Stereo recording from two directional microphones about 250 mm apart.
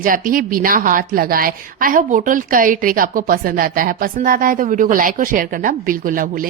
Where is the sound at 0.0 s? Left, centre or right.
Right.